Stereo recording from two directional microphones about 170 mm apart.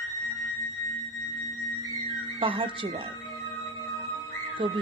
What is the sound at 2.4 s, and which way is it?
Speech, 30° right (ahead or behind).